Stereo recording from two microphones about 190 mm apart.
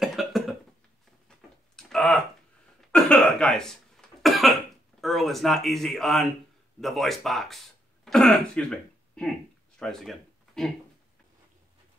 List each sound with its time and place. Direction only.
0.0 s cough: centre (ahead or behind)
1.8 s tick-tock: 5° left (ahead or behind)
2.9 s cough: 5° left (ahead or behind)
5.0 s speech: centre (ahead or behind)